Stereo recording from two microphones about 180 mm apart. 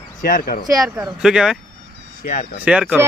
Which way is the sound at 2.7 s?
5° right (ahead or behind).